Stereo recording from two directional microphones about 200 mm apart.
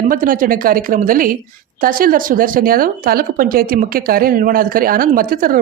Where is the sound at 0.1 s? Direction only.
45° right (ahead or behind).